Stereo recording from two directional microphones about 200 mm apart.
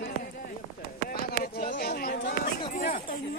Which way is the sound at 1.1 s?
45° left (ahead or behind).